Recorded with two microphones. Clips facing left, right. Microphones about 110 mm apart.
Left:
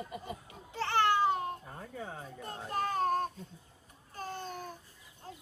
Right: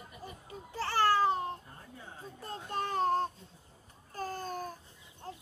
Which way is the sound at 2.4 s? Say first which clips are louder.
Left 1 dB; 30° right (ahead or behind).